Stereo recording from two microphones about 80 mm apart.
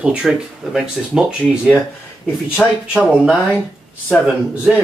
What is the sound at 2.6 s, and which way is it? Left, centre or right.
Speech, centre.